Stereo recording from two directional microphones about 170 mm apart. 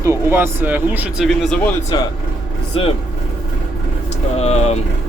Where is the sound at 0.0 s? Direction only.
15° right (ahead or behind).